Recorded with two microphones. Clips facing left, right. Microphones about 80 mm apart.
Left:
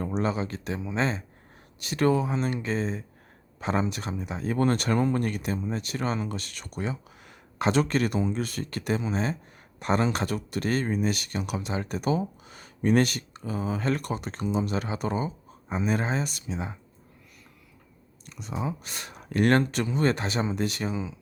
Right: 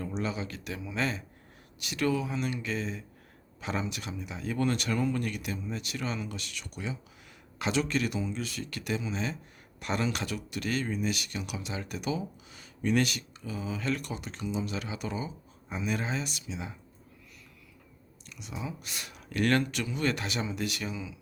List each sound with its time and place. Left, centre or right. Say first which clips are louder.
0.0 s speech: left 6 dB; left
18.3 s speech: left 7 dB; left